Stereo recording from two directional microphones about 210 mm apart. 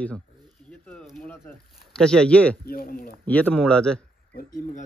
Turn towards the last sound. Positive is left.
turn(degrees=5)  # may be behind; listen again after turning